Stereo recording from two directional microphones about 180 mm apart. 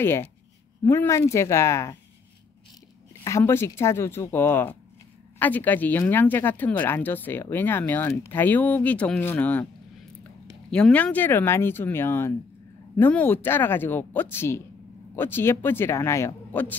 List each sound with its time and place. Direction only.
0.0 s speech: 15° left (ahead or behind)
3.3 s speech: 15° left (ahead or behind)
10.7 s speech: 5° left (ahead or behind)